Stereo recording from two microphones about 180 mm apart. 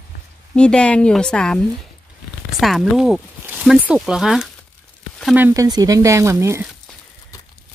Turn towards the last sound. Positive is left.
turn(degrees=-15)  # may be behind; listen again after turning